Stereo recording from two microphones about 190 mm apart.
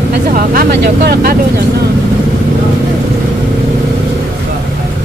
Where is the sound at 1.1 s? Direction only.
50° right (ahead or behind).